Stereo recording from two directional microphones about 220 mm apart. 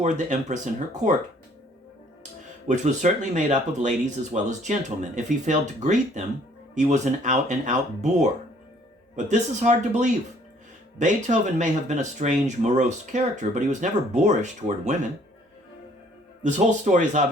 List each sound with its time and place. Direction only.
0.0 s speech: 30° right (ahead or behind)
2.6 s speech: 30° right (ahead or behind)
16.4 s speech: 35° right (ahead or behind)